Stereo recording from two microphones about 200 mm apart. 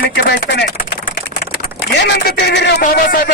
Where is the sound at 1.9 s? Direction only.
60° left (ahead or behind).